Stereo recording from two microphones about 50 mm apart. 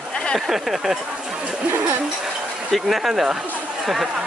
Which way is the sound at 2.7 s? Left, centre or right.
Centre.